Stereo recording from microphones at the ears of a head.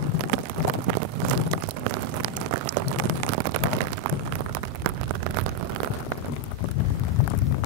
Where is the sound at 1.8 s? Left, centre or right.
Right.